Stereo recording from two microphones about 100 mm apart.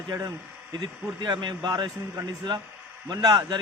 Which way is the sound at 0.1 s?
35° right (ahead or behind).